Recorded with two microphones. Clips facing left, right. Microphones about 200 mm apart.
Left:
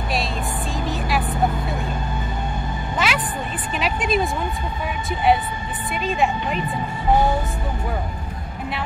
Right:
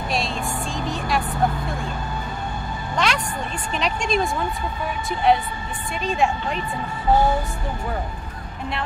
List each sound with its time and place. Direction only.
0.7 s vehicle: centre (ahead or behind)
3.0 s a sound: 5° left (ahead or behind)
6.0 s a woman's voice: centre (ahead or behind)